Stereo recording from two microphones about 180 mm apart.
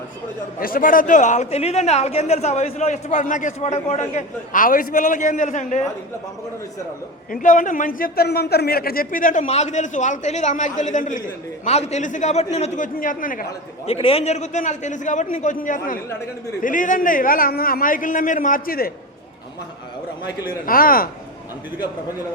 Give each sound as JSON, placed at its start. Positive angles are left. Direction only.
{"t": 0.6, "sound": "a man's voice", "side_deg": 50}
{"t": 7.3, "sound": "a man's voice", "side_deg": 45}
{"t": 13.8, "sound": "a man's voice", "side_deg": 35}
{"t": 20.7, "sound": "a man's voice", "side_deg": 55}